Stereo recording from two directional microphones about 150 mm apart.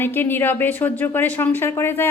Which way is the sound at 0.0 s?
15° left (ahead or behind).